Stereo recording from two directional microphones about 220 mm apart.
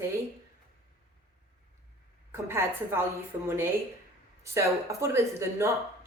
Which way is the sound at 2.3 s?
10° right (ahead or behind).